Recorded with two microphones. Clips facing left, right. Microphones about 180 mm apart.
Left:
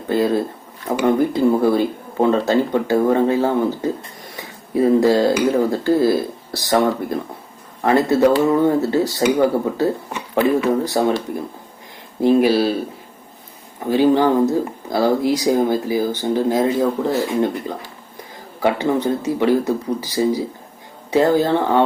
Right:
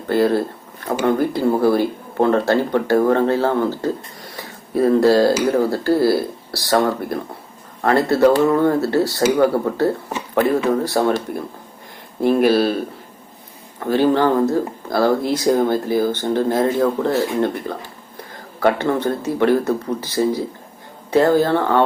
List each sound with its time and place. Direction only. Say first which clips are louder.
0.1 s speech: right 1 dB; 15° left (ahead or behind)
4.4 s a sound: even; 15° left (ahead or behind)
5.5 s speech: even; 20° left (ahead or behind)
12.3 s speech: even; 15° left (ahead or behind)
13.7 s speech: left 1 dB; 15° left (ahead or behind)